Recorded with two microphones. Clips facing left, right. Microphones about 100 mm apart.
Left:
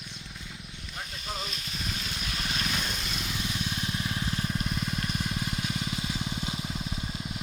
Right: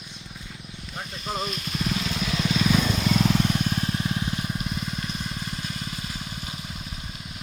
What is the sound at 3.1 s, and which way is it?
Vehicle, 80° right.